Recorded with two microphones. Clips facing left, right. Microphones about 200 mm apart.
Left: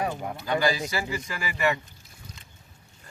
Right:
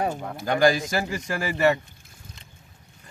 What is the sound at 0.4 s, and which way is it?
Speech, 50° right (ahead or behind).